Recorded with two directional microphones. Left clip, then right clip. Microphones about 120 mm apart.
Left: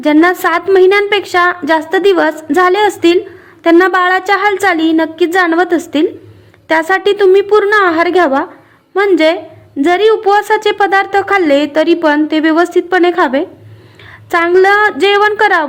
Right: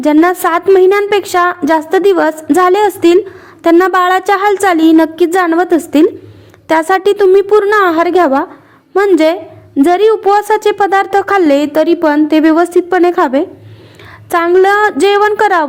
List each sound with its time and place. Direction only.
0.0 s speech: 30° right (ahead or behind)